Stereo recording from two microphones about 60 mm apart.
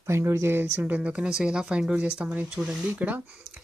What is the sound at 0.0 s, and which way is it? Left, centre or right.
Speech, right.